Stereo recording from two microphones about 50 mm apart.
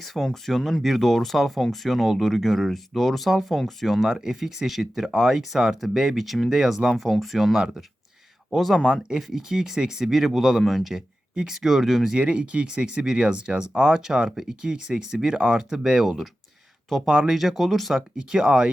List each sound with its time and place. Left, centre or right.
0.0 s speech: centre
4.0 s speech: centre
8.8 s speech: centre
10.6 s speech: centre
12.1 s speech: right
16.0 s speech: centre
17.3 s speech: centre
17.9 s speech: centre